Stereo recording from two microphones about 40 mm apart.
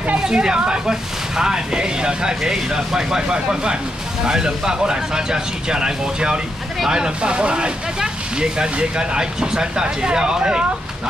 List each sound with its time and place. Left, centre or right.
0.2 s speech: centre